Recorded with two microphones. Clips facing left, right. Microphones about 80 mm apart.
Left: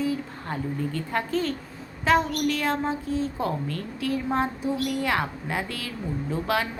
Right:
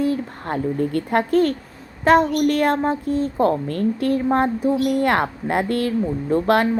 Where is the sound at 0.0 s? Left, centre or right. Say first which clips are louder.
Right 6 dB; right.